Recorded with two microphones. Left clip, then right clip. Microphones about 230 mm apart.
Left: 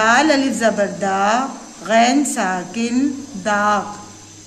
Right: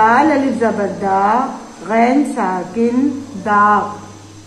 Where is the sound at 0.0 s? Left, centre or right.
Left.